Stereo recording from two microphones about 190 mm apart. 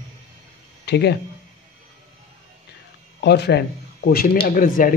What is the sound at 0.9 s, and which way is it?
Speech, 60° left (ahead or behind).